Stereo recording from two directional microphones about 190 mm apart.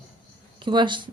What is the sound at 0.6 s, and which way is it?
Speech, 25° right (ahead or behind).